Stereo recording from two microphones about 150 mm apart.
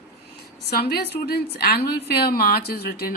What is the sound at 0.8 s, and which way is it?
A woman's voice, 90° left.